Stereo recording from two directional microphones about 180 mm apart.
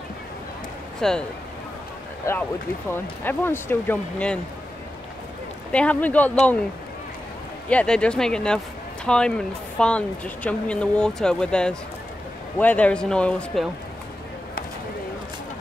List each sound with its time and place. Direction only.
1.0 s speech: 5° left (ahead or behind)
2.3 s speech: 15° left (ahead or behind)
5.7 s speech: 5° left (ahead or behind)
7.7 s speech: 5° left (ahead or behind)